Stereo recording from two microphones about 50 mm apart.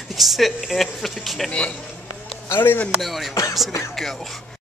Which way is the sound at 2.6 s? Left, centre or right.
Left.